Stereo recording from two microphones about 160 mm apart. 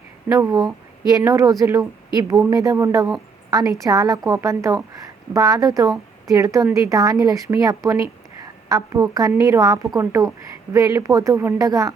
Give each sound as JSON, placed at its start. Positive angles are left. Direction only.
{"t": 0.3, "sound": "a woman's voice", "side_deg": -20}